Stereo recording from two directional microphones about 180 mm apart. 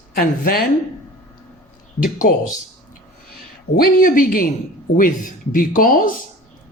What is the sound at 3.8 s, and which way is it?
Speech, 50° left (ahead or behind).